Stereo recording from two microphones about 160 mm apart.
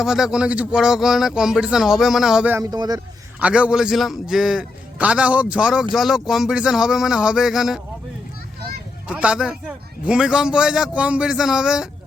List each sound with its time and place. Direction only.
0.0 s a man's voice: centre (ahead or behind)
2.6 s speech: 25° right (ahead or behind)
3.4 s a man's voice: 5° right (ahead or behind)
9.0 s a man's voice: 5° right (ahead or behind)